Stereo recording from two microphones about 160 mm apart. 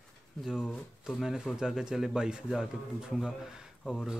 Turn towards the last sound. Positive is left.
turn(degrees=5)  # may be behind; listen again after turning